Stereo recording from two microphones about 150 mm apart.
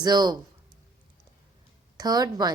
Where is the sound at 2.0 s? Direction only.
25° right (ahead or behind).